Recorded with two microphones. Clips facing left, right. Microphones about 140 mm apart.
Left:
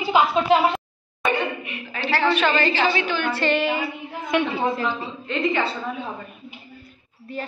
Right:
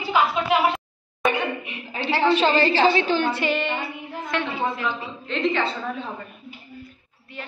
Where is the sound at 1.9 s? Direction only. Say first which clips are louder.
Right 1 dB; 20° right (ahead or behind).